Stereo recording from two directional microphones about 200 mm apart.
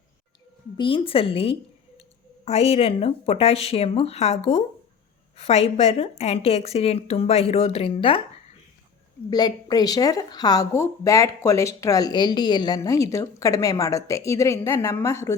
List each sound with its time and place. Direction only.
0.8 s a woman's voice: 25° left (ahead or behind)
9.3 s a woman's voice: 20° left (ahead or behind)